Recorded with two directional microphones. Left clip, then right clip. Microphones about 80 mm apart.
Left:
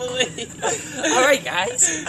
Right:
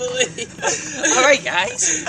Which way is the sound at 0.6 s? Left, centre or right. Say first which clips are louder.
Right 2 dB; left.